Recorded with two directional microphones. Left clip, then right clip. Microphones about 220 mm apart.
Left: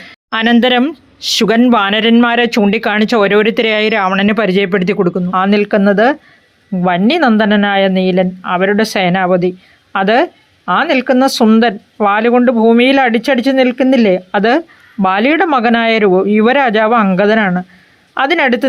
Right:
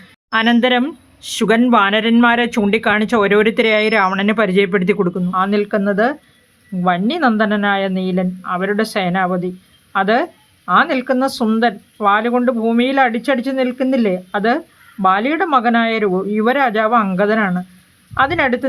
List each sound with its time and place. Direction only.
0.3 s speech: 20° left (ahead or behind)